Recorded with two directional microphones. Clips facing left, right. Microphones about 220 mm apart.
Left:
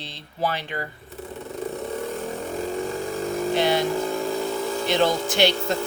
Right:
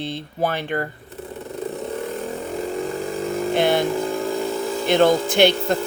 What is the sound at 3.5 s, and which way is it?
Vehicle, 55° right (ahead or behind).